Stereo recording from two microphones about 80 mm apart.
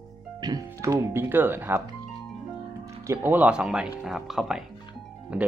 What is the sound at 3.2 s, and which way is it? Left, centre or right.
Speech, right.